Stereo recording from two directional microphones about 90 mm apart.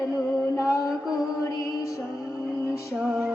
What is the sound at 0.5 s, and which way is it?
Mantra, 35° left (ahead or behind).